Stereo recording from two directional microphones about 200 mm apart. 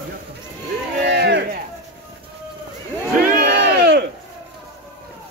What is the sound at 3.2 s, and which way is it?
Crowd, 50° right (ahead or behind).